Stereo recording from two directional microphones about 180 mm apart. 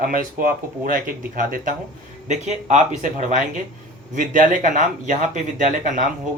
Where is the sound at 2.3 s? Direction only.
40° right (ahead or behind).